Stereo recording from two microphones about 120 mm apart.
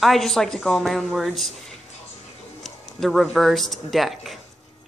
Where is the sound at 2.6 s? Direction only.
Centre (ahead or behind).